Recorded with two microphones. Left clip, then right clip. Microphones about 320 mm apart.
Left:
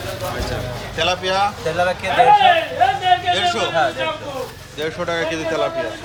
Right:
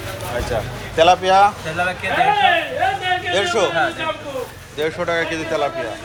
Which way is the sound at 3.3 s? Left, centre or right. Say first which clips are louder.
Even; centre.